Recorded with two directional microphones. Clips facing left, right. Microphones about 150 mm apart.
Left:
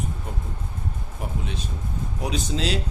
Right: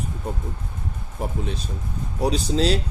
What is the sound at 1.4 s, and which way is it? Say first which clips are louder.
Speech: right 2 dB; 35° right (ahead or behind).